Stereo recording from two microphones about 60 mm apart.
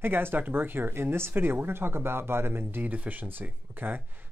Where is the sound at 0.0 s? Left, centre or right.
Right.